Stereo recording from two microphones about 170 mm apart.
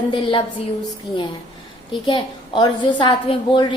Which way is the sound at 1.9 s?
25° left (ahead or behind).